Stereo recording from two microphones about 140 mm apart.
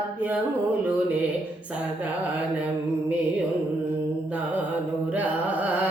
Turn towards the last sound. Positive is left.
turn(degrees=-10)  # may be behind; listen again after turning